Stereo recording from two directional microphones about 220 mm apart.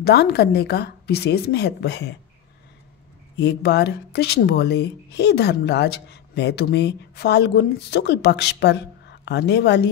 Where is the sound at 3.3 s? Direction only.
50° left (ahead or behind).